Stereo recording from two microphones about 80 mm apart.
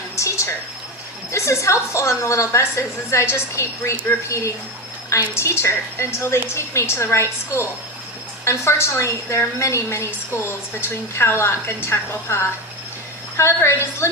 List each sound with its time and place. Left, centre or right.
0.2 s a sound: left
1.3 s a woman's voice: left
5.0 s a woman's voice: left